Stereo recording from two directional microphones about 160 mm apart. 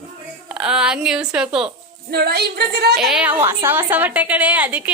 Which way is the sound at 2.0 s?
85° right.